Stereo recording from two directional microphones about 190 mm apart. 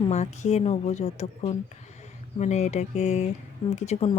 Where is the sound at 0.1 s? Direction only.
35° left (ahead or behind).